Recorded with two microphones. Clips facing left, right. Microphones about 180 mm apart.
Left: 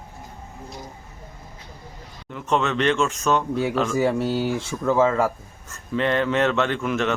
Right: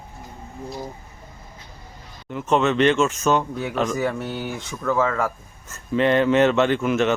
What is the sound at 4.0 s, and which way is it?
Speech, 30° left (ahead or behind).